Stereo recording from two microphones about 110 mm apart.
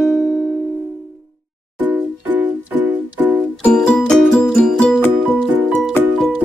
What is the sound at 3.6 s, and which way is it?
Music, 5° left (ahead or behind).